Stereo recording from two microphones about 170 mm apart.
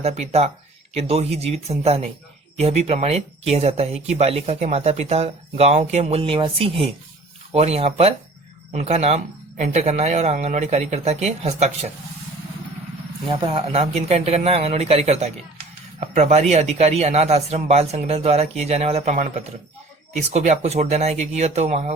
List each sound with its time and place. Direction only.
0.0 s speech: 35° right (ahead or behind)
13.2 s speech: 30° right (ahead or behind)